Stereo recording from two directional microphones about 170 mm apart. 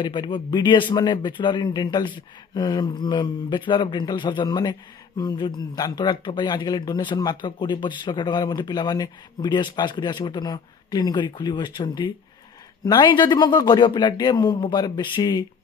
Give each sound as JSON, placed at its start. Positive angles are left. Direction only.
{"t": 0.0, "sound": "speech", "side_deg": 30}